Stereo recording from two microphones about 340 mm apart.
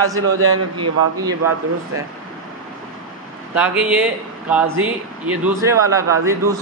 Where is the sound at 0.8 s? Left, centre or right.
Centre.